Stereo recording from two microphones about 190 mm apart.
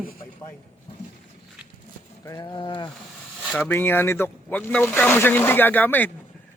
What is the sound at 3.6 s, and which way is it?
Speech, 10° left (ahead or behind).